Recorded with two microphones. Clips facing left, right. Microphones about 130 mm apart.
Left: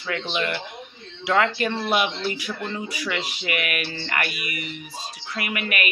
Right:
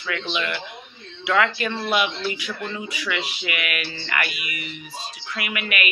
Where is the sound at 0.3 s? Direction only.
40° left (ahead or behind).